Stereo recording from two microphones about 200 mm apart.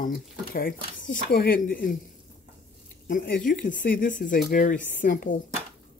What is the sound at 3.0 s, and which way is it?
Speech, 45° left (ahead or behind).